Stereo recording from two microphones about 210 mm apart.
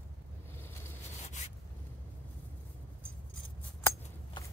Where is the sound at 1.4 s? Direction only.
35° left (ahead or behind).